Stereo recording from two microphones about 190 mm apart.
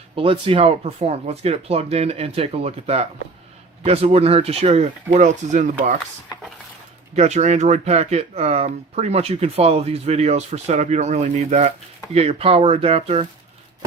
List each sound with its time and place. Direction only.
0.2 s speech: 30° right (ahead or behind)
7.2 s speech: 35° right (ahead or behind)